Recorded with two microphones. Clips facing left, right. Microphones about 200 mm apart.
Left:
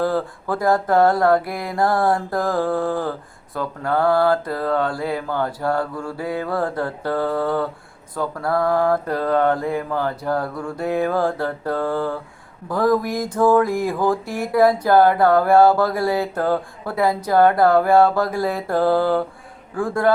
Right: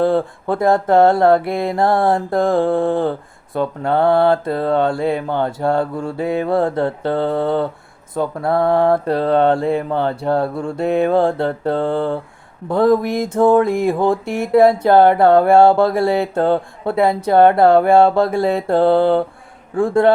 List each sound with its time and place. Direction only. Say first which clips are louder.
0.0 s mantra: right 5 dB; 25° right (ahead or behind)